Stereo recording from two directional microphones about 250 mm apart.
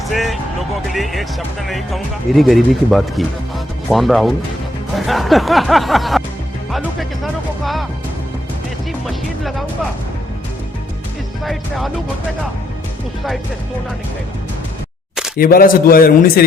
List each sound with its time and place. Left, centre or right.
0.1 s music: centre
0.9 s speech: centre
9.0 s speech: centre
15.4 s a man's voice: left